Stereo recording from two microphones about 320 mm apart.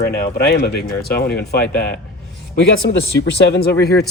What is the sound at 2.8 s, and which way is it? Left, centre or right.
Speech, left.